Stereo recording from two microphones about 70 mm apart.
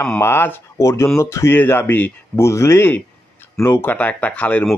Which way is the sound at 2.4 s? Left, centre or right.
Left.